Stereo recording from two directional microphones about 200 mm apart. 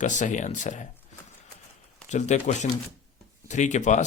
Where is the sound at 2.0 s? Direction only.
35° left (ahead or behind).